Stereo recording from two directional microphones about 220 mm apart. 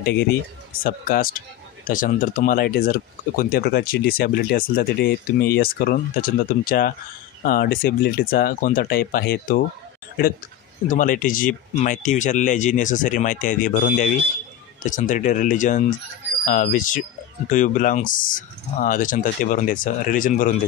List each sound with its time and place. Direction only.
0.8 s speech: 40° left (ahead or behind)
10.9 s speech: 35° left (ahead or behind)